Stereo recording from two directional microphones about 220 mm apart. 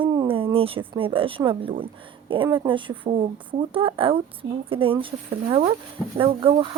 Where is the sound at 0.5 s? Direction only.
25° right (ahead or behind).